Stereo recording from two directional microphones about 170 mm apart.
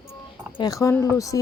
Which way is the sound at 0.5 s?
20° left (ahead or behind).